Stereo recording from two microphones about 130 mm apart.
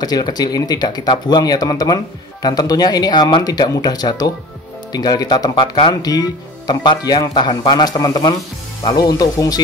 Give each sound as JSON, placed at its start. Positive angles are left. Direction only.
{"t": 0.0, "sound": "speech", "side_deg": 30}